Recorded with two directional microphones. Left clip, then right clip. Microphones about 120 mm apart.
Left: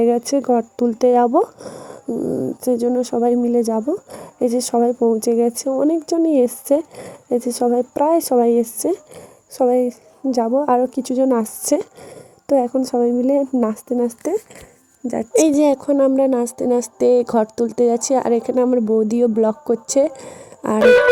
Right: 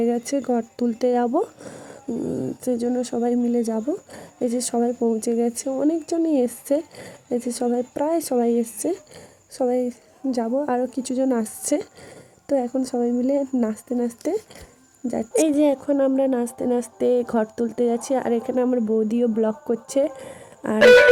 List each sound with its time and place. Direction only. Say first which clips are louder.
0.0 s speech: left 6 dB; 30° left (ahead or behind)
2.0 s speech: left 5 dB; centre (ahead or behind)
2.6 s a woman's voice: left 6 dB; 25° left (ahead or behind)
15.4 s a woman's voice: left 5 dB; 55° left (ahead or behind)